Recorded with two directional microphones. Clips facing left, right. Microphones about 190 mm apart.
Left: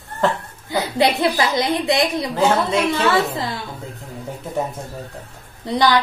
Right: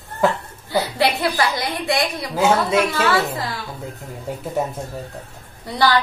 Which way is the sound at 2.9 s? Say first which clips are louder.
Left 2 dB; 25° left (ahead or behind).